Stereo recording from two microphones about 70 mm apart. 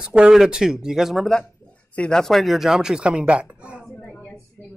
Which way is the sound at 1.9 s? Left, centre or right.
Centre.